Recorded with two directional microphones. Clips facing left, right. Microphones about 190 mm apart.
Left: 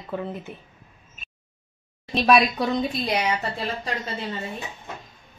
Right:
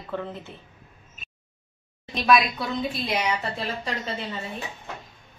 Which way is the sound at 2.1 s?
35° left (ahead or behind).